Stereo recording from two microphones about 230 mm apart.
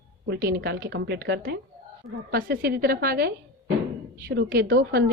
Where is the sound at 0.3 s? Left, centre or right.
Right.